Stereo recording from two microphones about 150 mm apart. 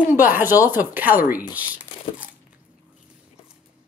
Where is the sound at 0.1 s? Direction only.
15° right (ahead or behind).